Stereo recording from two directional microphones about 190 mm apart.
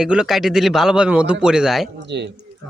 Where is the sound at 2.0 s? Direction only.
65° right (ahead or behind).